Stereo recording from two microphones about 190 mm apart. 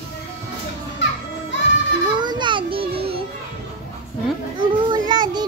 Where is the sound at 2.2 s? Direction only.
25° right (ahead or behind).